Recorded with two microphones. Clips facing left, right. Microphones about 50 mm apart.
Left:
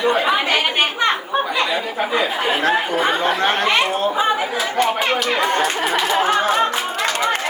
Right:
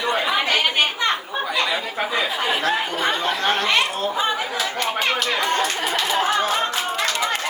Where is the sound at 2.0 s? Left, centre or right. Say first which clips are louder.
Left 4 dB; centre.